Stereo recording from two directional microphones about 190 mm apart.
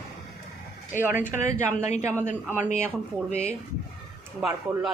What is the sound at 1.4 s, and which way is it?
Speech, 40° left (ahead or behind).